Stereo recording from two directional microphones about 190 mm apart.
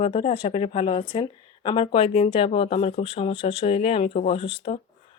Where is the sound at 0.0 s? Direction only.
30° left (ahead or behind).